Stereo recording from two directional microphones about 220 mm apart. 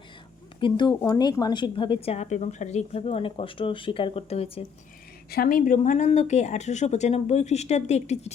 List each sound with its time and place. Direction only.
0.6 s a woman's voice: 20° left (ahead or behind)
5.3 s speech: 40° left (ahead or behind)